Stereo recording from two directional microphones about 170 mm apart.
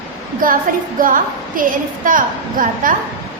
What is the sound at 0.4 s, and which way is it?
A woman's voice, 55° right (ahead or behind).